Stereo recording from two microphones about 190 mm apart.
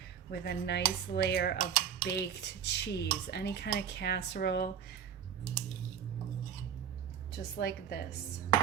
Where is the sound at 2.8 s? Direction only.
60° left (ahead or behind).